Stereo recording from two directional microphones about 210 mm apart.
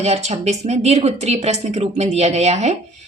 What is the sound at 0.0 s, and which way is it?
Speech, 30° right (ahead or behind).